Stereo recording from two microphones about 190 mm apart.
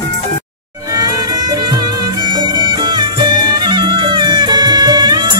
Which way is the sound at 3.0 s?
25° right (ahead or behind).